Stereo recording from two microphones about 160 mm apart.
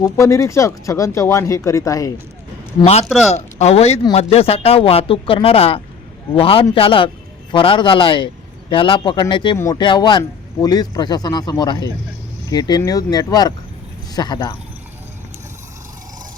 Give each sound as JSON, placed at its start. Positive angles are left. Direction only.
{"t": 0.0, "sound": "a man's voice", "side_deg": 20}
{"t": 2.8, "sound": "a man's voice", "side_deg": 40}